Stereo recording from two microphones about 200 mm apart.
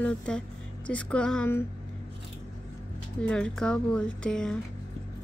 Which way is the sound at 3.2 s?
5° left (ahead or behind).